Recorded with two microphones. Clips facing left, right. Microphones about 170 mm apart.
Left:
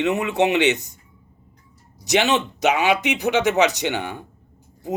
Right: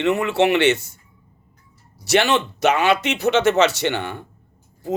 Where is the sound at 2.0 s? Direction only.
15° left (ahead or behind).